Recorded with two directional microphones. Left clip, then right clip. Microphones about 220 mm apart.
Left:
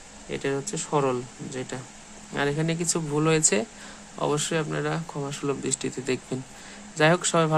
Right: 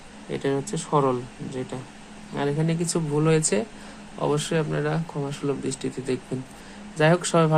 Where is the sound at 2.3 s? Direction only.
15° left (ahead or behind).